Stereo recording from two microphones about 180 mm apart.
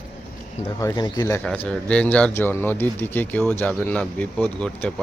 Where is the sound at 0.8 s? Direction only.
20° left (ahead or behind).